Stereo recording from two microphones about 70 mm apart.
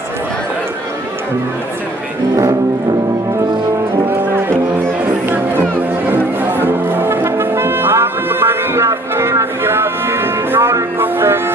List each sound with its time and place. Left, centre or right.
4.1 s music: right